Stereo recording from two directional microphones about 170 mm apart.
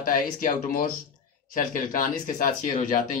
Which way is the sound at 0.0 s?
55° left (ahead or behind).